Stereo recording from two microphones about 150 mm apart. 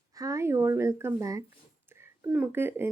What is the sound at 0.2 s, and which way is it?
A woman's voice, 20° right (ahead or behind).